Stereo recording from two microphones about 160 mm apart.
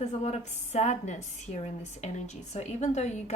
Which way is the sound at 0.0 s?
45° left (ahead or behind).